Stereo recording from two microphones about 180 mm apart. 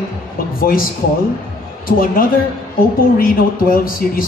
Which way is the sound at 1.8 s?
55° left (ahead or behind).